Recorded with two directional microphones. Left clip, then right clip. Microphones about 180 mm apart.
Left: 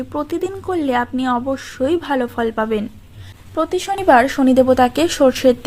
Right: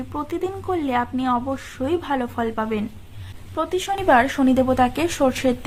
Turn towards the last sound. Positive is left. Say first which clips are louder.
# left 7 dB
turn(degrees=30)  # may be behind; listen again after turning